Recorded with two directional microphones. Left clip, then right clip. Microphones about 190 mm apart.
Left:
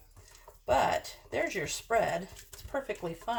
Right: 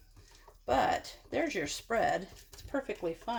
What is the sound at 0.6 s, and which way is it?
Speech, 35° right (ahead or behind).